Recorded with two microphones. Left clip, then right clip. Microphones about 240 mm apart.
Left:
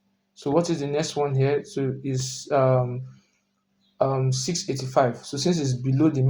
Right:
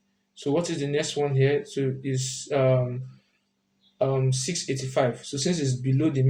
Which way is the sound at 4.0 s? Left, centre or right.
Left.